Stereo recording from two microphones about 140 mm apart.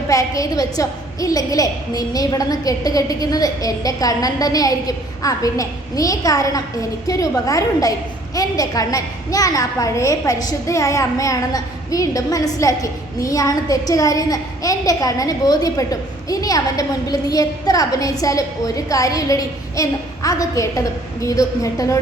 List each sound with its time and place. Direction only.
0.1 s a woman's voice: 25° left (ahead or behind)